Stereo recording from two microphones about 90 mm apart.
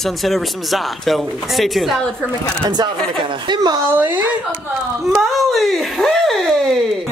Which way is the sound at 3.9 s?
20° right (ahead or behind).